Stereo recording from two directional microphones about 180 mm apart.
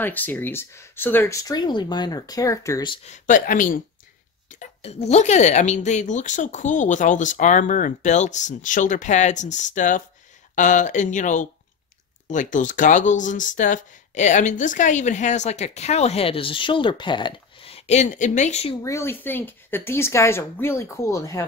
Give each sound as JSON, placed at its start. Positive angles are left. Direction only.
{"t": 0.0, "sound": "speech", "side_deg": 10}
{"t": 3.1, "sound": "speech", "side_deg": 45}
{"t": 18.8, "sound": "speech", "side_deg": 15}